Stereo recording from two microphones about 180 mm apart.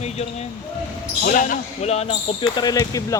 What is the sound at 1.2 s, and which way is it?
Speech, 50° left (ahead or behind).